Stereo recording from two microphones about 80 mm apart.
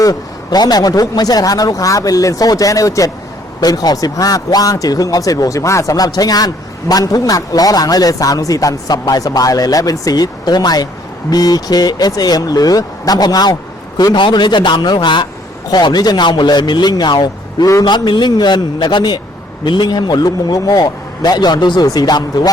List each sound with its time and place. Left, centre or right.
0.0 s speech: left
14.0 s a man's voice: left
15.7 s speech: left